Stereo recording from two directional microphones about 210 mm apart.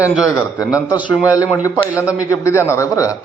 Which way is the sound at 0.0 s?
15° left (ahead or behind).